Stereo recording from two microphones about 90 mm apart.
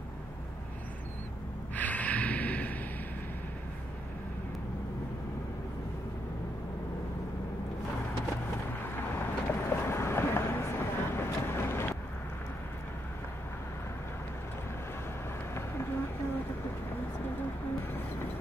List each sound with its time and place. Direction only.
1.8 s snort: 15° left (ahead or behind)
8.9 s boat: 25° left (ahead or behind)